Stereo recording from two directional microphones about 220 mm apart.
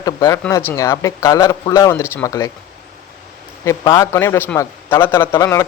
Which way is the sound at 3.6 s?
15° left (ahead or behind).